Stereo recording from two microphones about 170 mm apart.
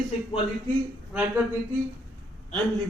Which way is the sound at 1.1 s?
5° right (ahead or behind).